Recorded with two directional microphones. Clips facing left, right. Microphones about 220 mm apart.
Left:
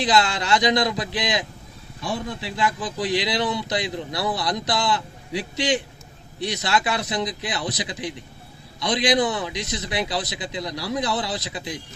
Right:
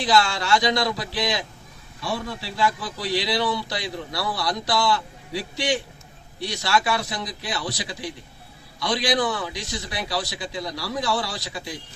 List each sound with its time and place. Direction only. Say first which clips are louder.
0.0 s a man's voice: even; 20° left (ahead or behind)